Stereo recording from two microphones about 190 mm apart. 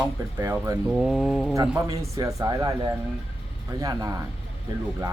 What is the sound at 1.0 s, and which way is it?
Speech, 5° right (ahead or behind).